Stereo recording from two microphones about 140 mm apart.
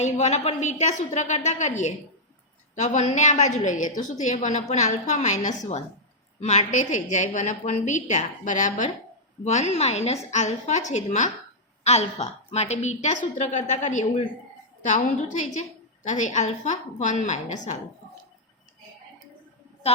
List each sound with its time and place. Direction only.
0.0 s a woman's voice: 55° left (ahead or behind)